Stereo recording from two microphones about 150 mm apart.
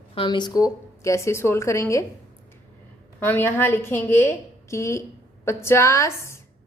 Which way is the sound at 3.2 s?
15° left (ahead or behind).